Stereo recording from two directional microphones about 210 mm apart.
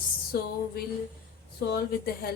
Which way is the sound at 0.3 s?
45° left (ahead or behind).